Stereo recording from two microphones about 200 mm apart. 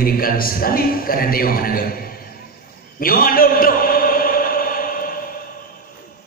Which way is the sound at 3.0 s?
45° left (ahead or behind).